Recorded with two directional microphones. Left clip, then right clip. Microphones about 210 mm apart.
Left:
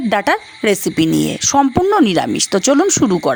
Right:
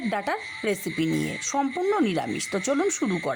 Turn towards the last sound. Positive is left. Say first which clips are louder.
# left 12 dB
turn(degrees=40)  # may be behind; listen again after turning